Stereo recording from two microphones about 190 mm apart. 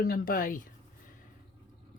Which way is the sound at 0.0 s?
50° left (ahead or behind).